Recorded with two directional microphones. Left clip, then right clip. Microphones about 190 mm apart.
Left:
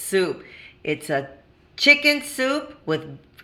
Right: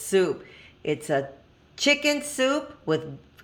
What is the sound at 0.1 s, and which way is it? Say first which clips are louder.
A woman's voice: left 1 dB; 5° right (ahead or behind).